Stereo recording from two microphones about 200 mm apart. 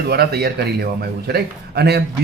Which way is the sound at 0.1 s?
50° right (ahead or behind).